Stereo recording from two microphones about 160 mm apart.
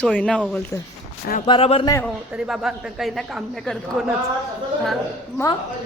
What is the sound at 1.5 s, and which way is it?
Speech, 35° left (ahead or behind).